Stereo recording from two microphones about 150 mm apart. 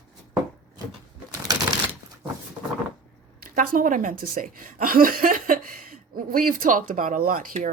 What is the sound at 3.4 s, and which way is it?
Speech, 65° right (ahead or behind).